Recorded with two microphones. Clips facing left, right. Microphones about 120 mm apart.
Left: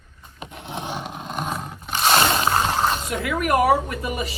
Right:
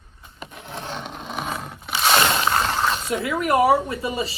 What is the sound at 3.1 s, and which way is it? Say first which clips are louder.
Speech: right 1 dB; 25° right (ahead or behind).